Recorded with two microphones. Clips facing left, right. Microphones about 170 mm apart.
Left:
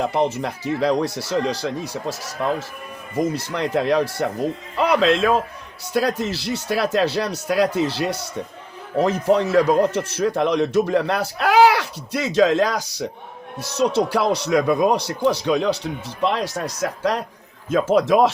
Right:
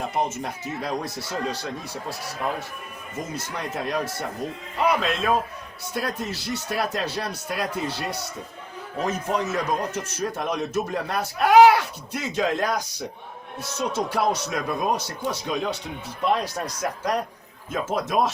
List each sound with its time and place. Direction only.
0.0 s speech: 75° left (ahead or behind)
5.9 s speech: 90° left
13.6 s speech: 75° left (ahead or behind)